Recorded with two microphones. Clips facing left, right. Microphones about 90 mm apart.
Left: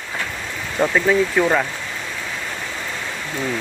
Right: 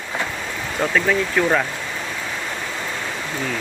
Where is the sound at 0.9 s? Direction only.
10° left (ahead or behind).